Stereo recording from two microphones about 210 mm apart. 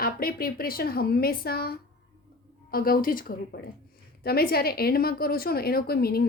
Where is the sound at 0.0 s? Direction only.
45° left (ahead or behind).